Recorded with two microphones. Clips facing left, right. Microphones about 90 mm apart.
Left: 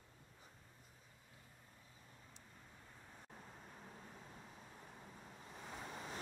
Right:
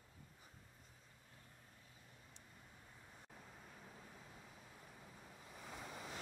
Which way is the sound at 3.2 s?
40° left (ahead or behind).